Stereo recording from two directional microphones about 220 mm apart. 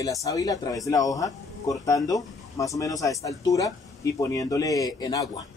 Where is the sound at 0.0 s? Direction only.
15° left (ahead or behind).